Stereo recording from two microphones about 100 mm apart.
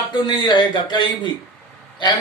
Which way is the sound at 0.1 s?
45° left (ahead or behind).